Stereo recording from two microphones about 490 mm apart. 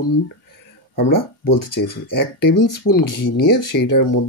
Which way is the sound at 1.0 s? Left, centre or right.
Left.